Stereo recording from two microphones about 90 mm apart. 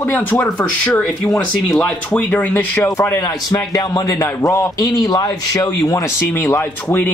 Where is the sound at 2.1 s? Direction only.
15° left (ahead or behind).